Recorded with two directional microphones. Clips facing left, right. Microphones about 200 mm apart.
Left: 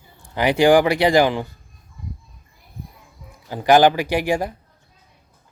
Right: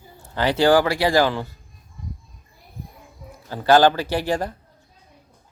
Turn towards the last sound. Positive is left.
turn(degrees=10)  # may be behind; listen again after turning